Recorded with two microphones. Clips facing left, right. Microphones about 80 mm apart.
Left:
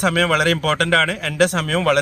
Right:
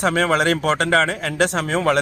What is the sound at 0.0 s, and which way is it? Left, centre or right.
Speech, right.